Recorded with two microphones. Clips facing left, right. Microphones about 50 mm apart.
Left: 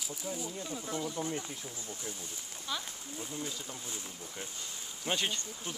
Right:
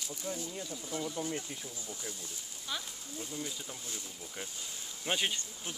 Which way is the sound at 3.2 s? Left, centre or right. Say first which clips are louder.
Even; centre.